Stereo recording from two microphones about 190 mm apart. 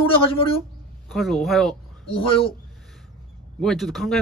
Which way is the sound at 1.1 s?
Centre (ahead or behind).